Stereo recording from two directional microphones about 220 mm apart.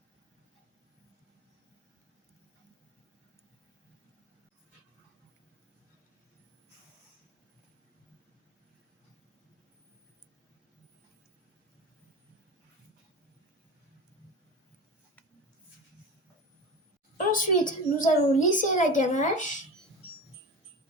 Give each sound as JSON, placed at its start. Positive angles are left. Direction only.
{"t": 17.2, "sound": "a woman's voice", "side_deg": 40}